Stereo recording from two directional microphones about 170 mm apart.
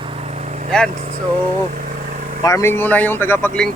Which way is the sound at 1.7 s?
50° right (ahead or behind).